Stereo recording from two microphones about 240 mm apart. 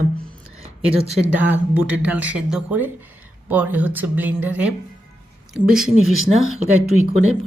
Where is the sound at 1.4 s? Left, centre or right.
Centre.